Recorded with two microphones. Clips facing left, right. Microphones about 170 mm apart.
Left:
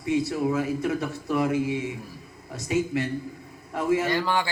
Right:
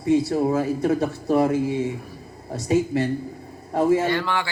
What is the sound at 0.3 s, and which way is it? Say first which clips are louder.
A man's voice: right 4 dB; 35° right (ahead or behind).